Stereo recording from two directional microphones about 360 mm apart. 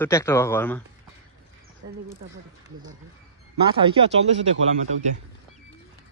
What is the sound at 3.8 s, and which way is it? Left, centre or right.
Speech, centre.